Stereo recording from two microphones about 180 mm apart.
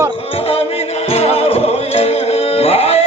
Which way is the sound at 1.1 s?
35° left (ahead or behind).